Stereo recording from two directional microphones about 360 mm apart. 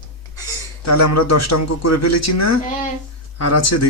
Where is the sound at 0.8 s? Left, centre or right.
Left.